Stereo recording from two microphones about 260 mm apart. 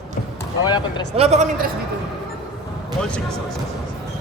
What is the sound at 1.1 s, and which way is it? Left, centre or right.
Speech, right.